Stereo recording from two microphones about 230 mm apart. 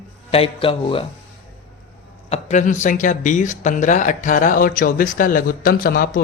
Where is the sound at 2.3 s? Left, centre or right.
Left.